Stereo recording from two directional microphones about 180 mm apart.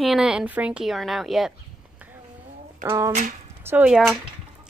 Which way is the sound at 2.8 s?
15° right (ahead or behind).